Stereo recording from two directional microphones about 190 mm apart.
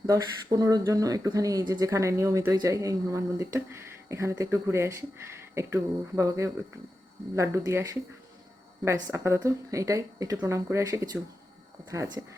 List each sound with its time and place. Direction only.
0.0 s speech: 20° right (ahead or behind)